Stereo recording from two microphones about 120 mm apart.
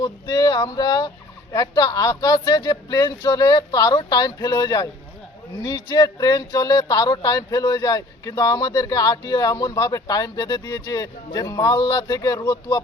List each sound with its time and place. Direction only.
0.0 s speech: 40° left (ahead or behind)